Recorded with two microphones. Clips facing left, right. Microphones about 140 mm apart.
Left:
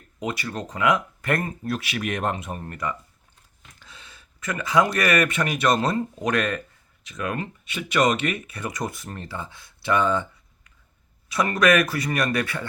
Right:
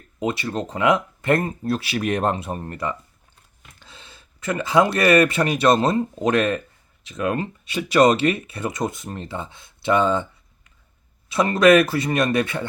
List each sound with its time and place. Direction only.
0.2 s speech: 25° right (ahead or behind)